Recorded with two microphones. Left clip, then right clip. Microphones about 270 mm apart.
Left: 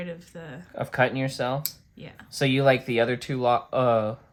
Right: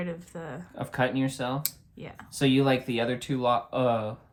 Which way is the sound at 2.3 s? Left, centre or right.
Left.